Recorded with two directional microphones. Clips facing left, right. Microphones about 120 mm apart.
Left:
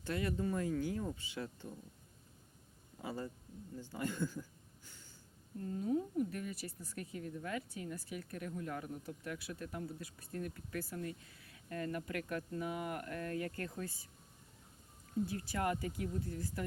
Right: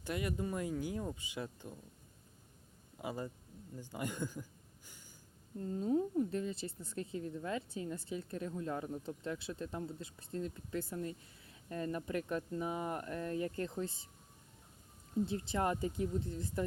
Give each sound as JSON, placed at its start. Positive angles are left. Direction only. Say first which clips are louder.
{"t": 0.0, "sound": "speech", "louder": "left 1 dB", "side_deg": -15}
{"t": 3.0, "sound": "speech", "louder": "right 1 dB", "side_deg": -15}
{"t": 4.9, "sound": "a sound", "louder": "right 1 dB", "side_deg": -15}
{"t": 5.5, "sound": "speech", "louder": "right 2 dB", "side_deg": -25}
{"t": 15.3, "sound": "speech", "louder": "right 2 dB", "side_deg": -25}